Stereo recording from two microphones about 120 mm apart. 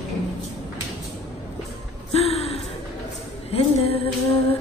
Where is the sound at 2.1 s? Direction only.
55° left (ahead or behind).